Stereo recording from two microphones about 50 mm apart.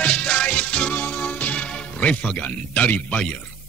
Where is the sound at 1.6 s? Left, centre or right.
Left.